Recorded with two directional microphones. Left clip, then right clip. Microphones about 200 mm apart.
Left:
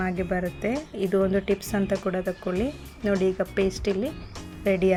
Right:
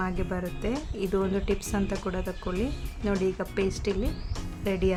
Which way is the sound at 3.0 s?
Centre (ahead or behind).